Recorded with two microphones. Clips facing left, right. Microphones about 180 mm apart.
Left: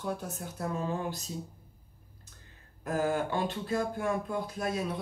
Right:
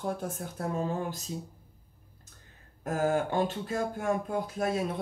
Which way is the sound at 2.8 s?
45° right (ahead or behind).